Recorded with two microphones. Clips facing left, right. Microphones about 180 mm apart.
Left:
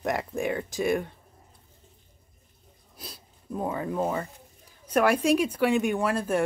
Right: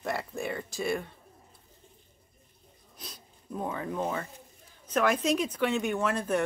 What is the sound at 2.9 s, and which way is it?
Speech, 5° left (ahead or behind).